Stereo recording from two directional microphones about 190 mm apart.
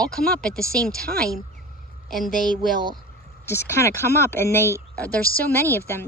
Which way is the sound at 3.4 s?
15° left (ahead or behind).